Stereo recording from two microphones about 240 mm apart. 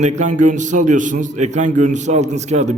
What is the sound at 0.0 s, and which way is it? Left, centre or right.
A man's voice, right.